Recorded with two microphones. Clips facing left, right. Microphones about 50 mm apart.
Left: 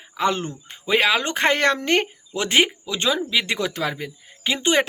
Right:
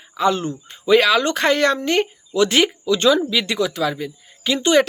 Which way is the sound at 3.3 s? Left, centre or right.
Left.